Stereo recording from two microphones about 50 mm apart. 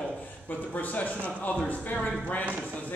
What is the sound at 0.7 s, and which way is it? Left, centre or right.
Speech, left.